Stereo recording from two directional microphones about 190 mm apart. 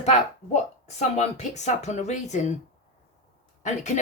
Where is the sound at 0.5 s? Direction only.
35° left (ahead or behind).